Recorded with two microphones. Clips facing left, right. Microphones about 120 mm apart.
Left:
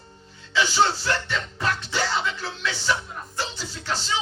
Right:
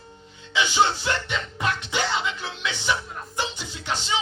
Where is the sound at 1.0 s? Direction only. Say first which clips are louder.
Even; 15° right (ahead or behind).